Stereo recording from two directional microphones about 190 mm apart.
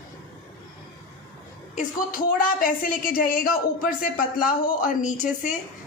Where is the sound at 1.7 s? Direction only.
50° left (ahead or behind).